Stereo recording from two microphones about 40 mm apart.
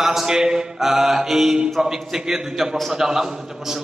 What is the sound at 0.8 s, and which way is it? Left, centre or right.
Mantra, centre.